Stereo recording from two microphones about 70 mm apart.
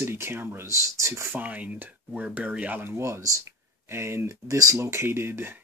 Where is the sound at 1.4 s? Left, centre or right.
Right.